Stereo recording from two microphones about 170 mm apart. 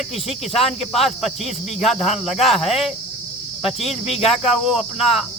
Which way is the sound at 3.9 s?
35° left (ahead or behind).